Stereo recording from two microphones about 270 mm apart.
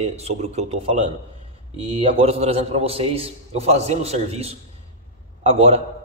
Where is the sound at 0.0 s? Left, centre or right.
Right.